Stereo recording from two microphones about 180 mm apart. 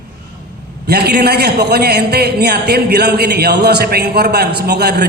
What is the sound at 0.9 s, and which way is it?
A man's voice, 60° right (ahead or behind).